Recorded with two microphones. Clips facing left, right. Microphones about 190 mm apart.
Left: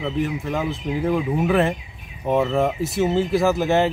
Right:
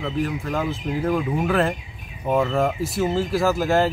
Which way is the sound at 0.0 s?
5° left (ahead or behind).